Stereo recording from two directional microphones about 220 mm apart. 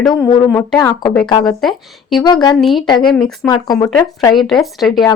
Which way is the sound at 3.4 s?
15° left (ahead or behind).